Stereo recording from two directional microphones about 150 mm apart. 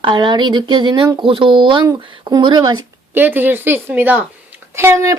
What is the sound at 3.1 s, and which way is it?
Speech, 15° right (ahead or behind).